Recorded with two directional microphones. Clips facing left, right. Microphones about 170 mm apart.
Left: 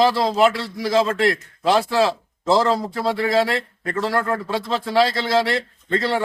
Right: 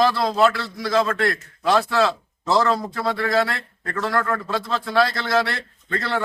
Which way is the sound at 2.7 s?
15° left (ahead or behind).